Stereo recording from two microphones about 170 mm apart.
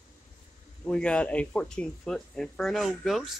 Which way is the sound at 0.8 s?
5° left (ahead or behind).